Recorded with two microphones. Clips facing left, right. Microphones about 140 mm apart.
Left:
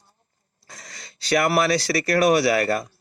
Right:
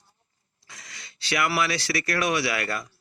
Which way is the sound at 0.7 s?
40° left (ahead or behind).